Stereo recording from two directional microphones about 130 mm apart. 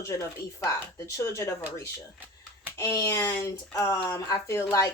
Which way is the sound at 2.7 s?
20° left (ahead or behind).